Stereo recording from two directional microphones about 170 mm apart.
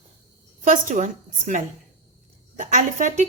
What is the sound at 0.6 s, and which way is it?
A woman's voice, 50° right (ahead or behind).